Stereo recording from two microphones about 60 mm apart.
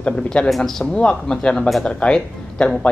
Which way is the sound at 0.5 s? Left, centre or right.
Centre.